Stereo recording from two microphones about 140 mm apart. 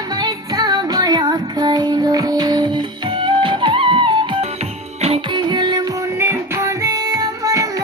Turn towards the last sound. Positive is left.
turn(degrees=-25)  # may be behind; listen again after turning